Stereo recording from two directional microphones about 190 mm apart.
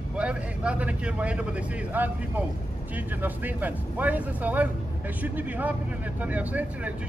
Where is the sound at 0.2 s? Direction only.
5° right (ahead or behind).